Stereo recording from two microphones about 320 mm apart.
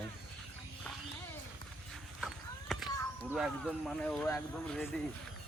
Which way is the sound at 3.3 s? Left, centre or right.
Centre.